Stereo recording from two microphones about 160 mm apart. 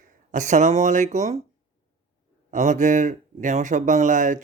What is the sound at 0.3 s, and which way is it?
Speech, 50° right (ahead or behind).